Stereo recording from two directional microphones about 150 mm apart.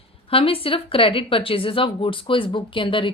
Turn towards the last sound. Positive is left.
turn(degrees=35)  # may be behind; listen again after turning